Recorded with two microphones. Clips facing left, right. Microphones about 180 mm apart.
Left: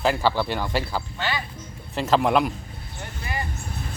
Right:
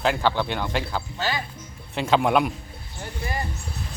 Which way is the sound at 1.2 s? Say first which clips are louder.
Right 2 dB; 40° right (ahead or behind).